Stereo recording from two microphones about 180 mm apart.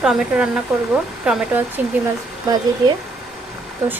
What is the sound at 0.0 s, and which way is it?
Speech, 5° right (ahead or behind).